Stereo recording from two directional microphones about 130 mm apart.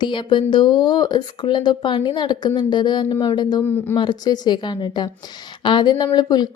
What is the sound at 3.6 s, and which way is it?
Speech, 15° left (ahead or behind).